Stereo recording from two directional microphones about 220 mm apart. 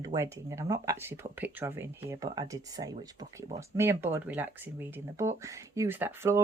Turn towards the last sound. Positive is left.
turn(degrees=-10)  # may be behind; listen again after turning